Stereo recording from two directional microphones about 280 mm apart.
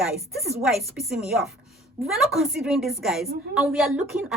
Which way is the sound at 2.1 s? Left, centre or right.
Centre.